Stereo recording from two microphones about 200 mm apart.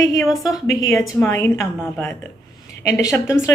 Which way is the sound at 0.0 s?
15° left (ahead or behind).